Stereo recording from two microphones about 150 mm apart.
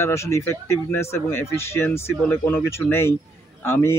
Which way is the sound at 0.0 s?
20° left (ahead or behind).